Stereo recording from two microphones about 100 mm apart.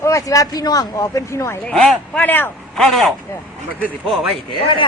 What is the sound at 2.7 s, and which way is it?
Speech, centre (ahead or behind).